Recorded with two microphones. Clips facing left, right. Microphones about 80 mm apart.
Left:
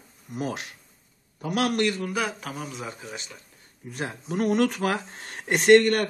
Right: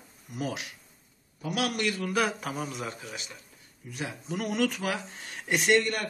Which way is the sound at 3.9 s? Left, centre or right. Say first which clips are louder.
Left 5 dB; left.